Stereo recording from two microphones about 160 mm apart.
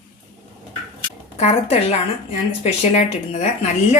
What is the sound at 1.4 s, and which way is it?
Speech, 45° left (ahead or behind).